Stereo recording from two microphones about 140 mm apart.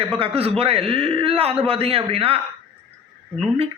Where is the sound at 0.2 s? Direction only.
45° right (ahead or behind).